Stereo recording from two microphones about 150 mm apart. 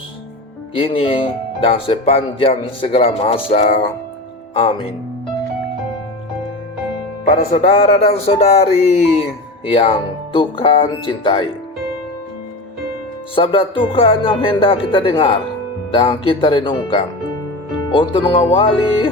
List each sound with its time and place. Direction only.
0.7 s speech: 35° left (ahead or behind)
7.5 s speech: 45° left (ahead or behind)
13.3 s speech: 35° left (ahead or behind)